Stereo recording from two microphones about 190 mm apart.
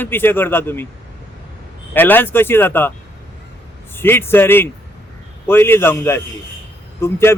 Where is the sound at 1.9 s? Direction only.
10° left (ahead or behind).